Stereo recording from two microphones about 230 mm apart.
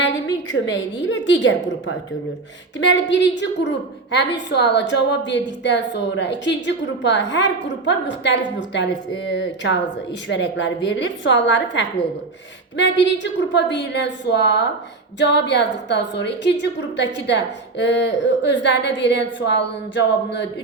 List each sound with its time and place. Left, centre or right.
0.5 s a woman's voice: left
2.7 s a woman's voice: left